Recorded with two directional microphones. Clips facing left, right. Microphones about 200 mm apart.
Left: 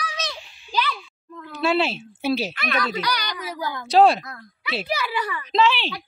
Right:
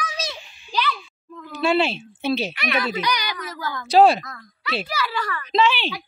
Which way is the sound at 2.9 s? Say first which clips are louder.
Right 2 dB; 20° right (ahead or behind).